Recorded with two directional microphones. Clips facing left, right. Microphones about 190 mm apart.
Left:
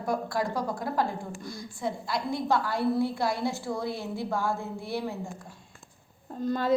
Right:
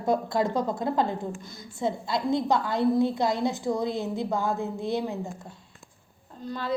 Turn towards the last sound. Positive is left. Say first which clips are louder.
# left 5 dB
turn(degrees=45)  # may be behind; listen again after turning